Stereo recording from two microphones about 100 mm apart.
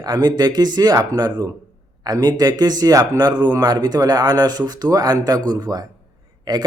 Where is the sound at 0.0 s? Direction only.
45° right (ahead or behind).